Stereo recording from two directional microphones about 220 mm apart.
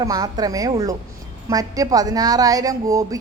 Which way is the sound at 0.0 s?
15° right (ahead or behind).